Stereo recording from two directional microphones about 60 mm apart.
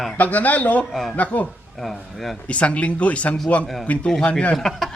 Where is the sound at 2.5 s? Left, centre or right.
Left.